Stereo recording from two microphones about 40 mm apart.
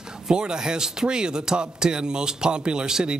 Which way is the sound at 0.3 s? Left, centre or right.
Right.